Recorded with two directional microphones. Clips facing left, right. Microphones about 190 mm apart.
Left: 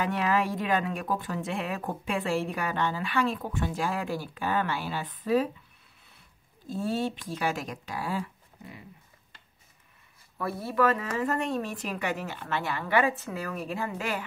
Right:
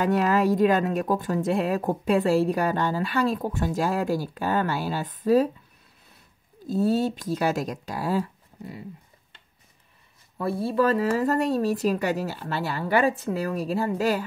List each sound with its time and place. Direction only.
0.0 s speech: 40° right (ahead or behind)
6.7 s speech: 40° right (ahead or behind)
10.3 s speech: 30° right (ahead or behind)